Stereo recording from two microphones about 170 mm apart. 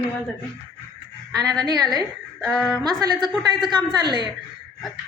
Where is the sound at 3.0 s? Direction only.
25° right (ahead or behind).